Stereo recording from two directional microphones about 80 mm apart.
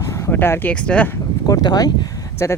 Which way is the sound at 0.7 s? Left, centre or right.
Centre.